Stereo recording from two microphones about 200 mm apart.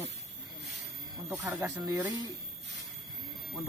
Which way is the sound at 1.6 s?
15° right (ahead or behind).